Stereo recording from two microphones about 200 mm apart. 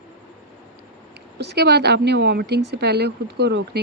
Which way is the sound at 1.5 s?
55° right (ahead or behind).